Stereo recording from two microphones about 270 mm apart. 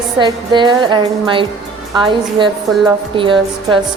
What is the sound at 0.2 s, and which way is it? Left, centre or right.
Speech, centre.